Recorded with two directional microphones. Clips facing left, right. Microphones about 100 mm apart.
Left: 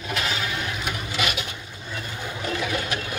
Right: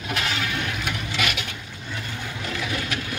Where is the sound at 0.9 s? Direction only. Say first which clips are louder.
Even; 30° left (ahead or behind).